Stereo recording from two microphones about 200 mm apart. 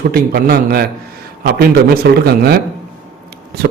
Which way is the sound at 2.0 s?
55° right (ahead or behind).